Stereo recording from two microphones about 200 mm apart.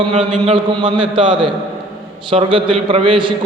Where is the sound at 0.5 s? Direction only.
25° right (ahead or behind).